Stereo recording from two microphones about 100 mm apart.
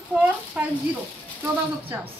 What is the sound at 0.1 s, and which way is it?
Speech, 15° right (ahead or behind).